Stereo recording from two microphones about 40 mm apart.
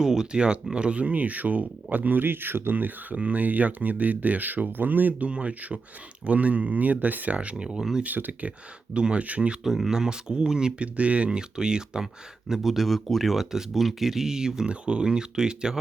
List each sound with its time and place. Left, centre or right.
0.0 s speech: centre; by 2.2 s right
2.2 s speech: right
2.7 s speech: right
3.2 s speech: right
5.3 s speech: right
7.8 s speech: centre
8.0 s speech: right
8.9 s speech: right
9.6 s speech: centre
9.9 s speech: centre
10.8 s speech: right
11.3 s speech: centre
12.5 s speech: centre
14.7 s speech: right